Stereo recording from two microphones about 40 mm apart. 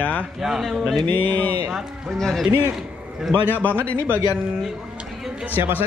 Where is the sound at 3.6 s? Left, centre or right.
Left.